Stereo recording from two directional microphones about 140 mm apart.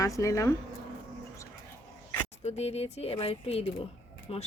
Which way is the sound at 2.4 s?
50° left (ahead or behind).